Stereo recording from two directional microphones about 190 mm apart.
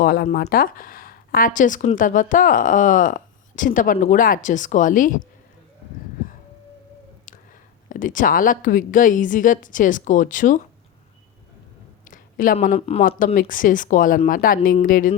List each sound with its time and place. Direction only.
0.0 s speech: 50° left (ahead or behind)
7.3 s a sound: 45° left (ahead or behind)
7.9 s speech: 45° left (ahead or behind)
12.0 s speech: 45° left (ahead or behind)